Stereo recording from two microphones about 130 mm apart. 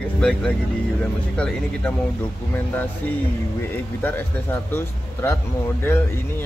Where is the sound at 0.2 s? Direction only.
5° left (ahead or behind).